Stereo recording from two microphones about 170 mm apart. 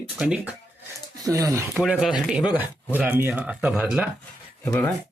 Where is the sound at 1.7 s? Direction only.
Centre (ahead or behind).